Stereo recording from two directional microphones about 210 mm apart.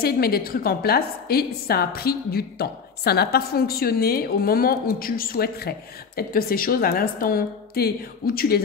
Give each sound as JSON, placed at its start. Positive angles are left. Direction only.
{"t": 0.0, "sound": "a woman's voice", "side_deg": 45}